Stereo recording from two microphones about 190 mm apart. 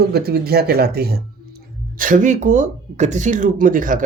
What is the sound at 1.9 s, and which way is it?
Speech, 45° right (ahead or behind).